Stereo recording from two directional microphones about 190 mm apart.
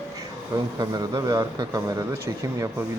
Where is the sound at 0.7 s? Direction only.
20° right (ahead or behind).